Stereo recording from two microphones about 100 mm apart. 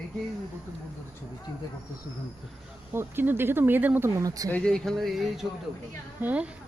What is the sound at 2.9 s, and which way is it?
Speech, 20° right (ahead or behind).